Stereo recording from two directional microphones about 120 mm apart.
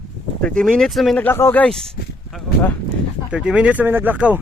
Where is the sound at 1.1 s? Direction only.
15° left (ahead or behind).